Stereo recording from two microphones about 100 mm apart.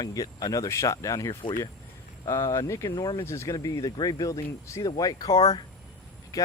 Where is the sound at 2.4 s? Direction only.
30° left (ahead or behind).